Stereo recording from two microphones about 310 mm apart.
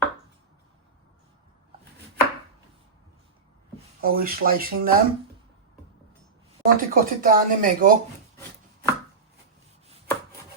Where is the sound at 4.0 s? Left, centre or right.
Right.